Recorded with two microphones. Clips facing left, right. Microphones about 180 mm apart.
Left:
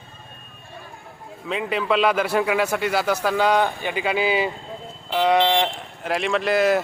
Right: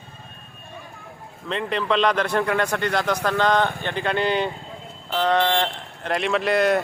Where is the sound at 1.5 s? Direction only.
5° left (ahead or behind).